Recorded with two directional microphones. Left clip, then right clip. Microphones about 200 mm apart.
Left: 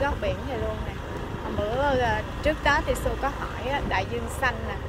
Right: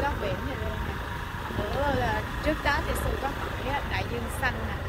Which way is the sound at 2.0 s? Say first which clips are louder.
Left 3 dB; 20° left (ahead or behind).